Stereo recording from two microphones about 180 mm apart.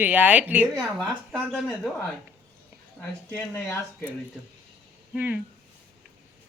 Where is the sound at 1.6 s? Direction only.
Centre (ahead or behind).